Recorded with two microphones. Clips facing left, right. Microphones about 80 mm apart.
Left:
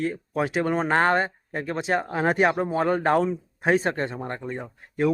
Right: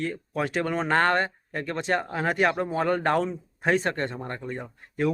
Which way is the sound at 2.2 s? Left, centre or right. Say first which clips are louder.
Left 4 dB; left.